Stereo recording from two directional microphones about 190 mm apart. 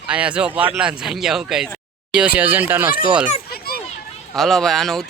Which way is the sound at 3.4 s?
55° left (ahead or behind).